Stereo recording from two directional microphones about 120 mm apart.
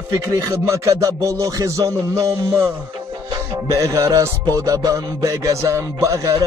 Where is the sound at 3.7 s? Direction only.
25° right (ahead or behind).